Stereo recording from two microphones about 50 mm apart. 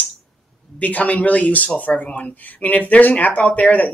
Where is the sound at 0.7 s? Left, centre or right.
Left.